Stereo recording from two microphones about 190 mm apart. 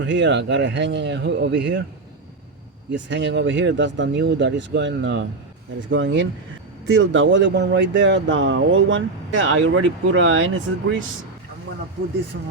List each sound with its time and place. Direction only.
0.0 s speech: 70° right (ahead or behind)
2.9 s speech: 70° right (ahead or behind); by 10.9 s 90° right